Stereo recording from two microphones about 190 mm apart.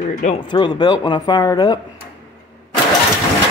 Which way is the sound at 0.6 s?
25° left (ahead or behind).